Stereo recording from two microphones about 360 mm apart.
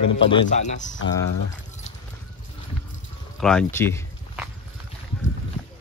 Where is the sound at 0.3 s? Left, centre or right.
Centre.